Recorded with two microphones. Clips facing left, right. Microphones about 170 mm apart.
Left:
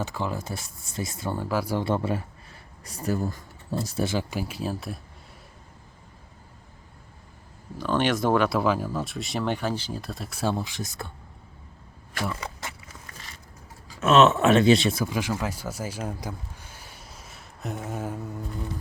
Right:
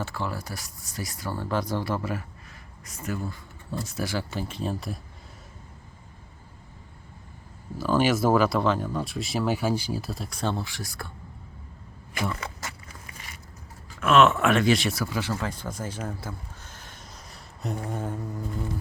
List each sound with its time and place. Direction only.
0.0 s speech: 15° left (ahead or behind)
1.4 s speech: 10° left (ahead or behind)
1.8 s speech: 25° left (ahead or behind)
3.8 s speech: 30° left (ahead or behind); by 4.9 s centre (ahead or behind)
7.8 s speech: 5° right (ahead or behind); by 11.1 s 20° left (ahead or behind)
12.1 s speech: centre (ahead or behind)
14.0 s speech: 20° left (ahead or behind); by 18.2 s 5° left (ahead or behind)